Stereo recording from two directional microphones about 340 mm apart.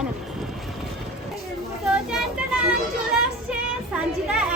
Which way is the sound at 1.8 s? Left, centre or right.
Centre.